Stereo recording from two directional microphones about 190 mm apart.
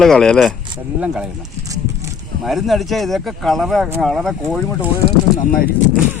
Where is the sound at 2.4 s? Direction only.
Centre (ahead or behind).